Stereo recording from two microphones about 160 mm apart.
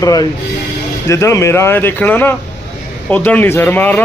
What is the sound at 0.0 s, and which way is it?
A man's voice, 20° left (ahead or behind).